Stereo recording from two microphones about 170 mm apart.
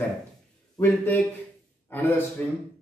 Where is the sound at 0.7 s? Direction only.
15° left (ahead or behind).